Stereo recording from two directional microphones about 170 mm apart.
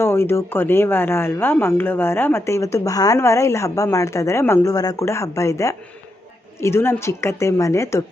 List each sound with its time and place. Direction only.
0.0 s speech: 15° left (ahead or behind)